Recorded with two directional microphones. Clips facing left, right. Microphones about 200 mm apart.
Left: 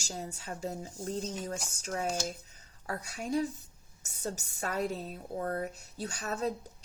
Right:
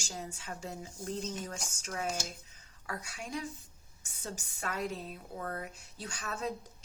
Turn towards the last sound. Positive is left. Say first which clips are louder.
# left 5 dB
turn(degrees=40)  # may be behind; listen again after turning